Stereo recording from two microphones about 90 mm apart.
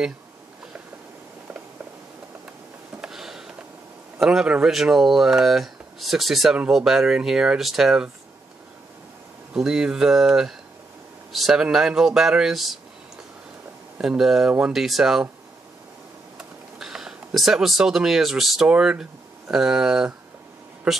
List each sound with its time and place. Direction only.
3.0 s a sound: 5° right (ahead or behind)
4.2 s speech: 5° right (ahead or behind)
9.5 s speech: 5° right (ahead or behind)
13.9 s speech: 5° right (ahead or behind)
16.3 s a sound: 5° right (ahead or behind)
18.7 s speech: 10° right (ahead or behind)